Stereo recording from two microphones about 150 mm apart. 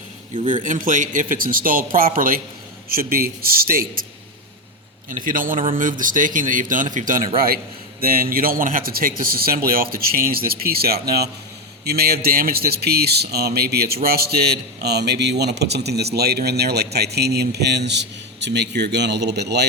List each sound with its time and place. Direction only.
0.6 s speech: 60° right (ahead or behind)
2.9 s a man's voice: 80° right
5.0 s speech: 65° right (ahead or behind)
7.3 s a man's voice: 80° right
19.5 s speech: 90° right